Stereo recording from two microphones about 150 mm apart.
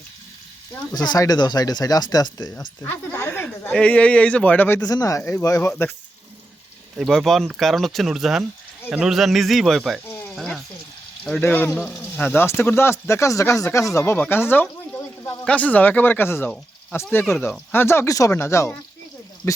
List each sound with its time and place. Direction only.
0.9 s speech: 25° left (ahead or behind)
2.8 s speech: 15° left (ahead or behind)
4.8 s speech: 25° left (ahead or behind)
6.9 s speech: centre (ahead or behind)
11.3 s speech: 10° left (ahead or behind)
15.2 s a sound: 25° left (ahead or behind)
15.4 s speech: 10° left (ahead or behind)